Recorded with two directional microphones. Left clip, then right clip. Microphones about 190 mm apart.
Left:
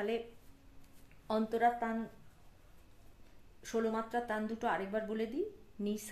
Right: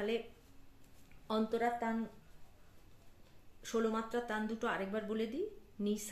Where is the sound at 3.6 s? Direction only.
30° left (ahead or behind).